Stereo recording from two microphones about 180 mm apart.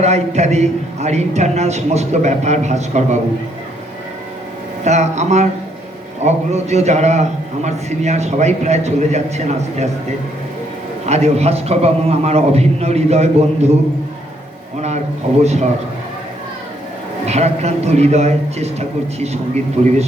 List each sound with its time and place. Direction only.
0.0 s a man's voice: 35° right (ahead or behind)
4.8 s a man's voice: 40° right (ahead or behind)
11.0 s a man's voice: 35° right (ahead or behind)
14.8 s a man's voice: 40° right (ahead or behind)
17.2 s a man's voice: 35° right (ahead or behind)